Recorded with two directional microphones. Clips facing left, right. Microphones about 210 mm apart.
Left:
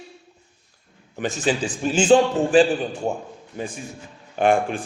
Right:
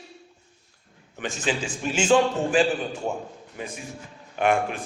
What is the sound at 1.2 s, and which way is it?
A man's voice, 35° left (ahead or behind).